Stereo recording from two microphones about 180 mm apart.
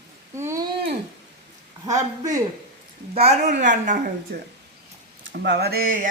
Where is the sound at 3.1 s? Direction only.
40° right (ahead or behind).